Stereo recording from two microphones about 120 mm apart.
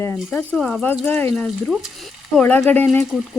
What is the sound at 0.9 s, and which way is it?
Speech, 15° left (ahead or behind).